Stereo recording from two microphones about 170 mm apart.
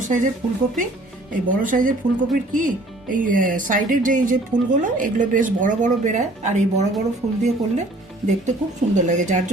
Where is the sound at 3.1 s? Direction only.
50° right (ahead or behind).